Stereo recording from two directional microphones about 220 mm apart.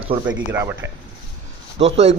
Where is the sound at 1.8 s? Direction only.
30° right (ahead or behind).